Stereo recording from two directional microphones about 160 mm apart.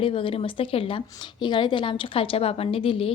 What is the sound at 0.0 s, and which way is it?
A woman's voice, 35° left (ahead or behind).